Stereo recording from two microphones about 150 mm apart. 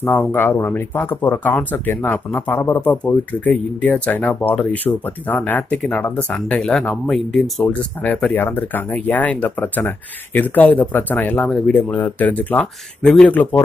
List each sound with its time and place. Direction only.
0.0 s speech: 15° left (ahead or behind)